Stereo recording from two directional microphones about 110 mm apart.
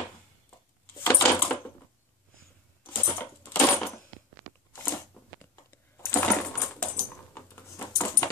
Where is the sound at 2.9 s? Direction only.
20° left (ahead or behind).